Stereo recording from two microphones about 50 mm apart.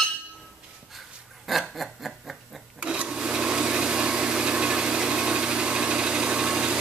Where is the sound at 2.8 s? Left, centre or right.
Right.